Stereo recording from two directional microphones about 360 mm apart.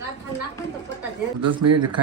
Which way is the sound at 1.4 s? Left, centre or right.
Right.